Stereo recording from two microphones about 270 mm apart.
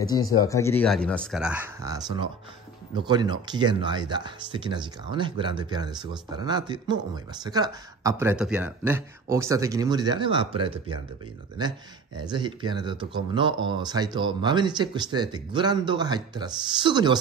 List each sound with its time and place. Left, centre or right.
0.0 s speech: centre
12.2 s speech: centre